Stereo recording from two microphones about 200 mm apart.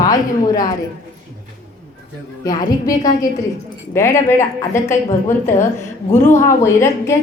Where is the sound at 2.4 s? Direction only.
20° left (ahead or behind).